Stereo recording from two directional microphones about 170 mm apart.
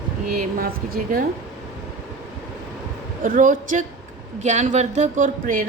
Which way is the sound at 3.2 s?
50° right (ahead or behind).